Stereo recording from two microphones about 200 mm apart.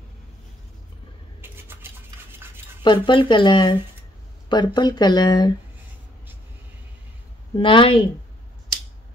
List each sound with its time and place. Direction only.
1.4 s toothbrush: 10° right (ahead or behind)
2.8 s speech: 25° left (ahead or behind)
7.5 s speech: 25° left (ahead or behind)